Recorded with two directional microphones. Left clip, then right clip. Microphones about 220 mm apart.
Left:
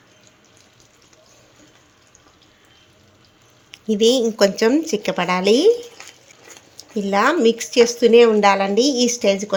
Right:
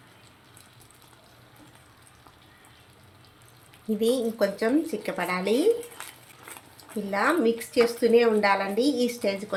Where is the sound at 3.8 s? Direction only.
40° left (ahead or behind).